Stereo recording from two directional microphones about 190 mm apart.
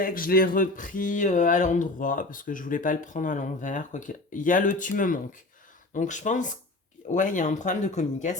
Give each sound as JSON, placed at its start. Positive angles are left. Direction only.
{"t": 0.0, "sound": "speech", "side_deg": 50}